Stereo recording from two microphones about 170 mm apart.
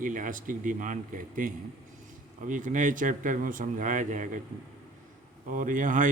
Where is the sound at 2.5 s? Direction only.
50° right (ahead or behind).